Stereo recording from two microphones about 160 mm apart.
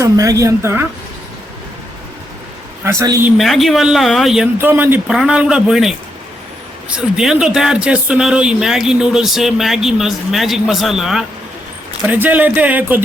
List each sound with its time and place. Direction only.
0.0 s a woman's voice: 20° right (ahead or behind)
2.8 s a woman's voice: 20° right (ahead or behind)
3.2 s speech: centre (ahead or behind)
4.5 s speech: 15° right (ahead or behind)